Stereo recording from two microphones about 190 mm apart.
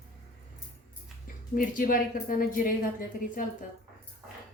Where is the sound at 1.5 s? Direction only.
45° left (ahead or behind).